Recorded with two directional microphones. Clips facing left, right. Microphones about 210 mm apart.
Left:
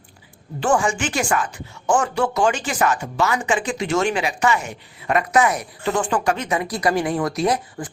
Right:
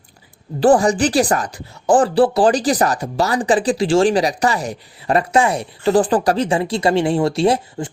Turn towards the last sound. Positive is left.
turn(degrees=-30)  # may be behind; listen again after turning